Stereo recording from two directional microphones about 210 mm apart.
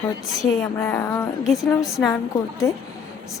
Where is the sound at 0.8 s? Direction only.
10° left (ahead or behind).